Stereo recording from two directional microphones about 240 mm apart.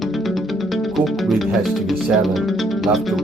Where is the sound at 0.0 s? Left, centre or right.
Centre.